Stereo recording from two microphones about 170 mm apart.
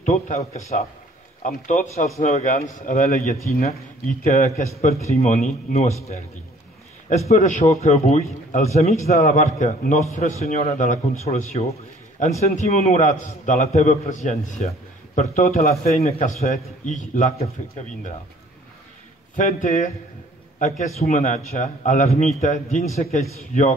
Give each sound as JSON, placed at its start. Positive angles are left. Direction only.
{"t": 0.0, "sound": "a man's voice", "side_deg": 45}
{"t": 1.7, "sound": "a man's voice", "side_deg": 45}
{"t": 7.2, "sound": "a man's voice", "side_deg": 45}
{"t": 19.3, "sound": "a man's voice", "side_deg": 45}